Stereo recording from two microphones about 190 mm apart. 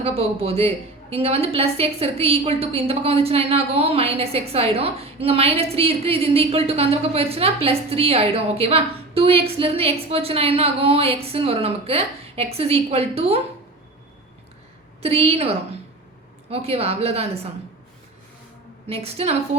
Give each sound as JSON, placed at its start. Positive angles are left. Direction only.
{"t": 0.0, "sound": "a woman's voice", "side_deg": -30}
{"t": 15.0, "sound": "a woman's voice", "side_deg": -30}
{"t": 18.9, "sound": "a woman's voice", "side_deg": -30}